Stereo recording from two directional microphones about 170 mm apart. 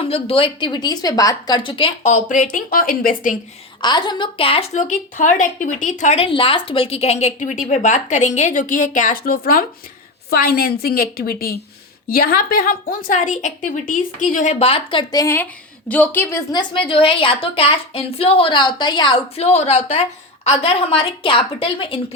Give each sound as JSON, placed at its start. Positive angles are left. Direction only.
{"t": 0.0, "sound": "a woman's voice", "side_deg": 35}
{"t": 2.0, "sound": "a woman's voice", "side_deg": 45}
{"t": 3.8, "sound": "a woman's voice", "side_deg": 25}
{"t": 16.5, "sound": "a woman's voice", "side_deg": 25}